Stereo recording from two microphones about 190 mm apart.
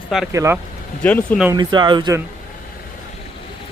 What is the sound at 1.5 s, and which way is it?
Speech, 25° right (ahead or behind).